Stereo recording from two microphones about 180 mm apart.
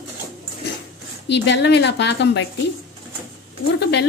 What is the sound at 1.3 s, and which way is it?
A woman's voice, 75° left (ahead or behind).